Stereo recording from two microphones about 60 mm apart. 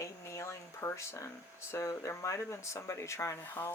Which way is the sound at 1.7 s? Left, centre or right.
Left.